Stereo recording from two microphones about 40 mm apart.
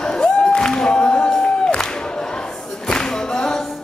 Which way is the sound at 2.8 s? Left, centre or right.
Centre.